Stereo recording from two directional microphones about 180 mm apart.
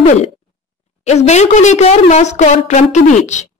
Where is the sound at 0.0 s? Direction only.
40° left (ahead or behind).